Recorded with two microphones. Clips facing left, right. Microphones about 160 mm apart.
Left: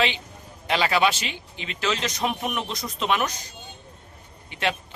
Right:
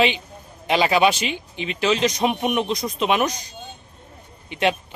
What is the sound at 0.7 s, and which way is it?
Speech, 15° right (ahead or behind).